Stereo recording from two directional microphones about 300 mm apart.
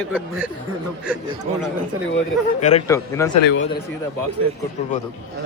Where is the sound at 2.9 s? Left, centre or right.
Centre.